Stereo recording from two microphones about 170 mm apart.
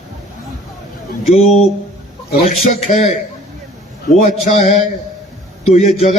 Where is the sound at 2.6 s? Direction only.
45° left (ahead or behind).